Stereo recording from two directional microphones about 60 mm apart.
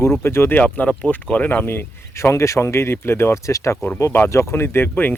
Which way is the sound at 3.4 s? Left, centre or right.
Left.